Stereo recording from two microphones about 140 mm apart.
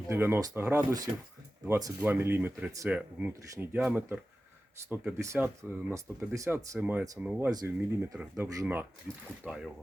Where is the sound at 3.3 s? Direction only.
20° right (ahead or behind).